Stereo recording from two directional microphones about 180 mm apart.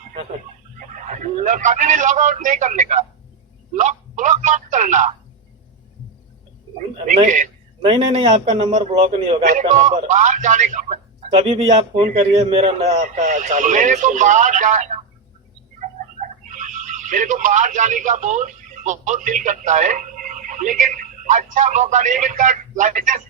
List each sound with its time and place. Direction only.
1.0 s a man's voice: 45° right (ahead or behind)
7.0 s a man's voice: 45° right (ahead or behind)
7.9 s a man's voice: 30° right (ahead or behind)
9.5 s a man's voice: 45° right (ahead or behind)
16.5 s speech: 45° right (ahead or behind)